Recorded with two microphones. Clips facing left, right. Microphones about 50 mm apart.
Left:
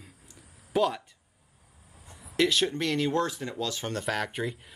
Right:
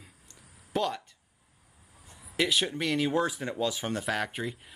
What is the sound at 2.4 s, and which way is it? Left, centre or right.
Speech, centre.